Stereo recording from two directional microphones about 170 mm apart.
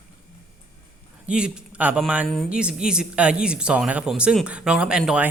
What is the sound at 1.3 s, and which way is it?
Speech, 5° right (ahead or behind).